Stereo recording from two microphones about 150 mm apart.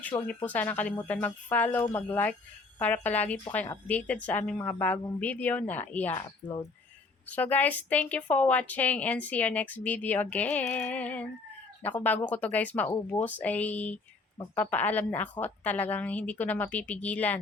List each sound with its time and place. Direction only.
0.4 s a woman's voice: 10° left (ahead or behind)
6.1 s speech: 30° left (ahead or behind)
7.3 s a woman's voice: 10° left (ahead or behind)